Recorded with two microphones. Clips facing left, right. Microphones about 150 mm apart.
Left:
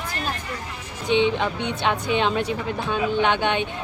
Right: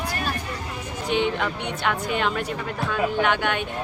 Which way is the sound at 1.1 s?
20° left (ahead or behind).